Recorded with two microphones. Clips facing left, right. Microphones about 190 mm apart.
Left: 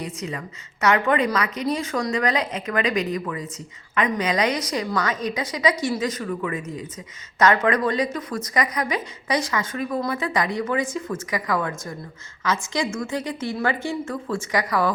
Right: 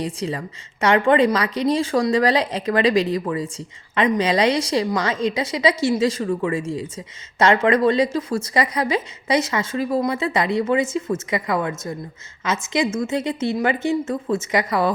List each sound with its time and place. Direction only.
0.0 s a woman's voice: 30° right (ahead or behind)